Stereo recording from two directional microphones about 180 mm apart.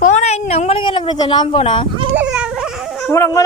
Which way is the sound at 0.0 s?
40° left (ahead or behind).